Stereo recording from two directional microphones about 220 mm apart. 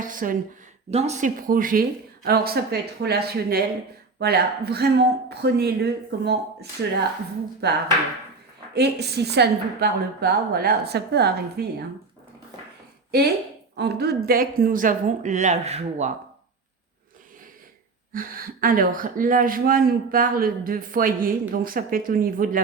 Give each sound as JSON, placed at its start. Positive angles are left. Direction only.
{"t": 0.0, "sound": "a sound", "side_deg": -40}
{"t": 0.9, "sound": "a woman's voice", "side_deg": -30}
{"t": 13.1, "sound": "speech", "side_deg": -50}
{"t": 18.1, "sound": "speech", "side_deg": -40}